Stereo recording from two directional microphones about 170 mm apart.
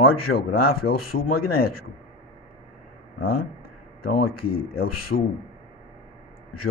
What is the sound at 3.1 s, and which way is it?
Speech, 60° left (ahead or behind).